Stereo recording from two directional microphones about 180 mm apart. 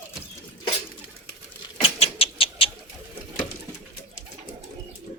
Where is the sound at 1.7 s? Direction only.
35° left (ahead or behind).